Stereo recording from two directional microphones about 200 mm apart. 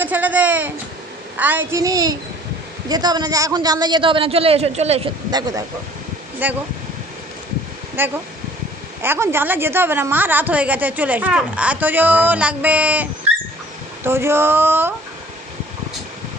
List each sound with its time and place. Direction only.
0.0 s a woman's voice: 10° right (ahead or behind); by 5.1 s 30° right (ahead or behind)
5.3 s a woman's voice: 15° right (ahead or behind)
8.0 s a woman's voice: 10° right (ahead or behind)